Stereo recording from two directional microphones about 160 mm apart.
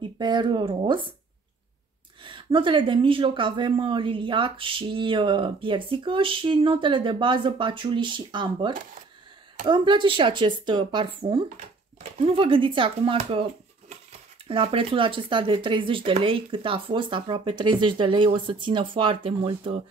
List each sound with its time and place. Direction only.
0.0 s a woman's voice: 30° right (ahead or behind)
2.2 s a woman's voice: 30° right (ahead or behind)